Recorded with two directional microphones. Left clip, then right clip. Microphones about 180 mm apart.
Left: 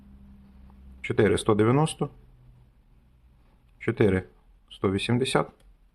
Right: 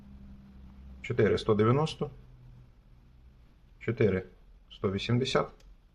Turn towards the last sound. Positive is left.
turn(degrees=25)  # may be behind; listen again after turning